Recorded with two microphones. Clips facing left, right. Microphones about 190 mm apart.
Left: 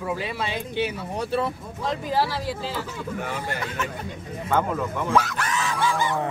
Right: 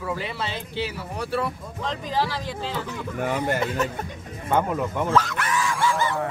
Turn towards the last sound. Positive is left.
turn(degrees=15)  # may be behind; listen again after turning